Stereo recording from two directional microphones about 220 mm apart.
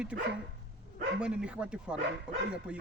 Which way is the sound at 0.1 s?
5° right (ahead or behind).